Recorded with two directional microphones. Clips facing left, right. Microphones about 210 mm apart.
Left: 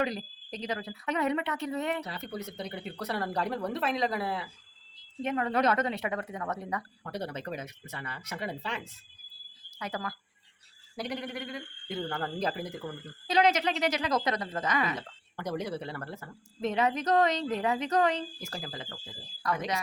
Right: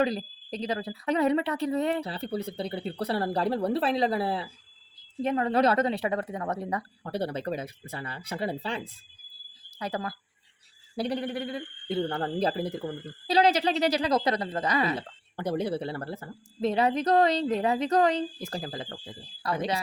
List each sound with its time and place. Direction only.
0.0 s speech: 30° right (ahead or behind)